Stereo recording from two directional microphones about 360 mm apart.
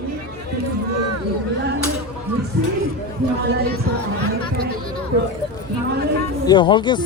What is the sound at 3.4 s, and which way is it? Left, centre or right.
Music, right.